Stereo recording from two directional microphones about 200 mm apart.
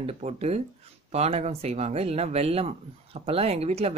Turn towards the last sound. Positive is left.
turn(degrees=-30)  # may be behind; listen again after turning